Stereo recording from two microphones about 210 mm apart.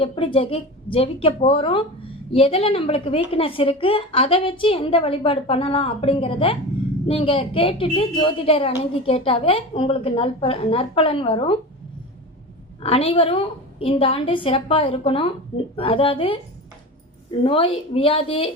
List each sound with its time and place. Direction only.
0.0 s speech: 25° left (ahead or behind)
12.8 s speech: 30° left (ahead or behind)
17.4 s speech: 25° left (ahead or behind)